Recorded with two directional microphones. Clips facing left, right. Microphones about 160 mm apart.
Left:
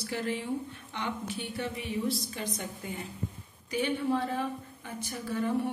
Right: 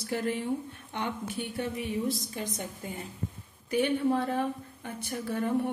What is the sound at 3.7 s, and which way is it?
A woman's voice, 55° right (ahead or behind).